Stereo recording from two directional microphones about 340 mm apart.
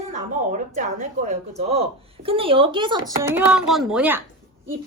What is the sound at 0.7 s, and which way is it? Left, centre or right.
A woman's voice, right.